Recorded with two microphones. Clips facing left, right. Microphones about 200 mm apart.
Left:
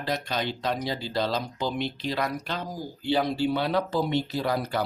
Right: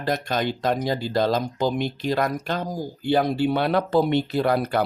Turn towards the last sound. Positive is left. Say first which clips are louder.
# right 6 dB
turn(degrees=-60)  # may be behind; listen again after turning